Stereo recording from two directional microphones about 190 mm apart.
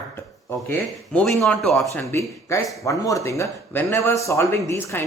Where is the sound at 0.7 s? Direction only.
10° left (ahead or behind).